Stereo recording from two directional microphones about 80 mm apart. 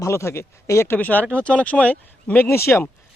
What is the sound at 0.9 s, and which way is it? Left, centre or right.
Speech, centre.